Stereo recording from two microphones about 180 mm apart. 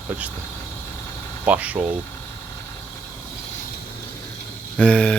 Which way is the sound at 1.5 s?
10° right (ahead or behind).